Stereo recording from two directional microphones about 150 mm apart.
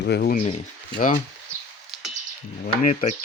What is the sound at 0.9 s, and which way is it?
Speech, 60° left (ahead or behind).